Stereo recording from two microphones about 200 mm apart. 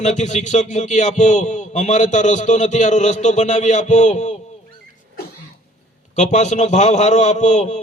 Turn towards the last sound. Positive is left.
turn(degrees=35)  # may be behind; listen again after turning